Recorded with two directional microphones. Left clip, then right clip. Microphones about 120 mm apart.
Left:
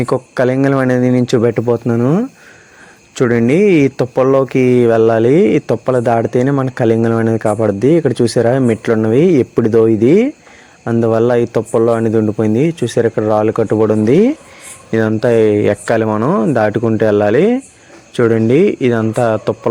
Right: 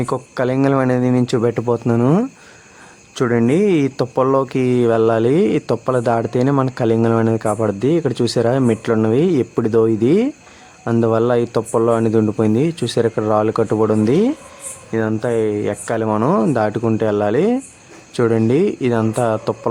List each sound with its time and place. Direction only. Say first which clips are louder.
0.0 s speech: left 6 dB; 30° left (ahead or behind)
2.0 s speech: left 2 dB; centre (ahead or behind)
3.2 s speech: left 4 dB; 25° left (ahead or behind)
14.8 s speech: left 6 dB; 40° left (ahead or behind)
16.0 s speech: left 2 dB; 15° left (ahead or behind)